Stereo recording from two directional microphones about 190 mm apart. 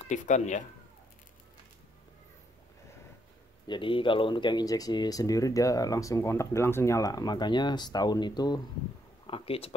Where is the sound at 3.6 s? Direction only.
25° left (ahead or behind).